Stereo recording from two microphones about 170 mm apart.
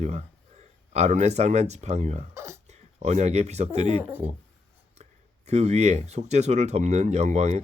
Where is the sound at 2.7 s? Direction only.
40° right (ahead or behind).